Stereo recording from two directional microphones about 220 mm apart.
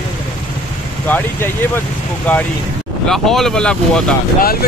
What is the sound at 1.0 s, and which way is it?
Speech, 10° left (ahead or behind).